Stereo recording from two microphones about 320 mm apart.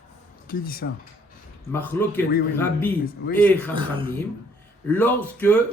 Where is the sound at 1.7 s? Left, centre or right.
Centre.